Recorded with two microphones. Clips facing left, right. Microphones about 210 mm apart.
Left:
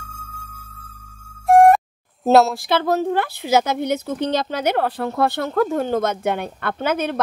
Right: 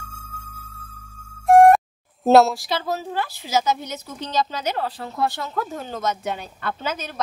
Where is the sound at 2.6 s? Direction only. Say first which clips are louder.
Left 7 dB; 55° left (ahead or behind).